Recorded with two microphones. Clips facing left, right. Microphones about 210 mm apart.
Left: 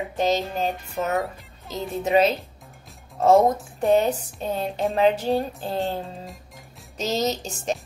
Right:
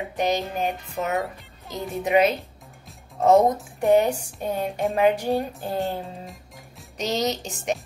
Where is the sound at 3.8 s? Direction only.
15° right (ahead or behind).